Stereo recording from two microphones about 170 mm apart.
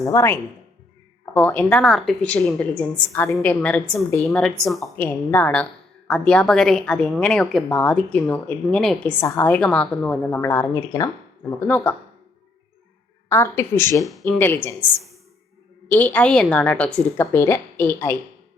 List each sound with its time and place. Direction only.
0.0 s a woman's voice: 15° left (ahead or behind)
1.5 s a woman's voice: 10° left (ahead or behind)
4.9 s a woman's voice: 10° left (ahead or behind)
9.2 s a woman's voice: 15° left (ahead or behind)
9.6 s a woman's voice: 5° left (ahead or behind)
13.2 s a woman's voice: 15° left (ahead or behind)
14.0 s speech: centre (ahead or behind)
14.3 s a woman's voice: 10° left (ahead or behind)
15.9 s a woman's voice: 10° left (ahead or behind)